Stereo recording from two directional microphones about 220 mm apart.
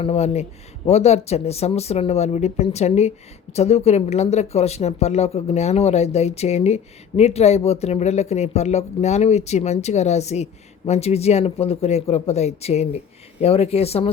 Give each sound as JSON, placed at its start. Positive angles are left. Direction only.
{"t": 0.0, "sound": "speech", "side_deg": 30}